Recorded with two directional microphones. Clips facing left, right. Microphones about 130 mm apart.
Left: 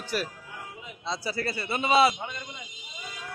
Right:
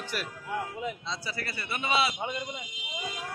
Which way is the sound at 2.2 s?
20° right (ahead or behind).